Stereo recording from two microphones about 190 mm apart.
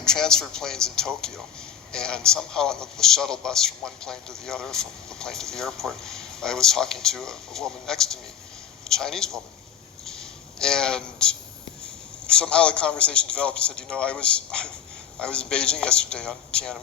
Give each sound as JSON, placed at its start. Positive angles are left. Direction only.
{"t": 0.0, "sound": "a man's voice", "side_deg": 5}
{"t": 10.0, "sound": "a sound", "side_deg": 0}
{"t": 11.8, "sound": "a man's voice", "side_deg": 5}